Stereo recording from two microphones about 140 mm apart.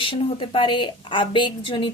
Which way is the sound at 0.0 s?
40° left (ahead or behind).